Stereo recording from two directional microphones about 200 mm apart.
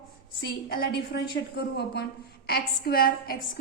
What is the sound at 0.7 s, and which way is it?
A woman's voice, 50° left (ahead or behind).